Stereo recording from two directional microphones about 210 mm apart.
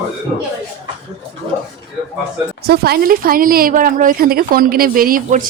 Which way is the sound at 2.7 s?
50° right (ahead or behind).